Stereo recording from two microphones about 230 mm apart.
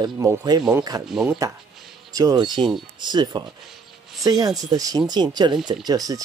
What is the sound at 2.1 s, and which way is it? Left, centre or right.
Speech, centre.